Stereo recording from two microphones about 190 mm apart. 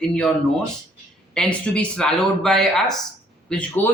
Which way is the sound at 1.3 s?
5° left (ahead or behind).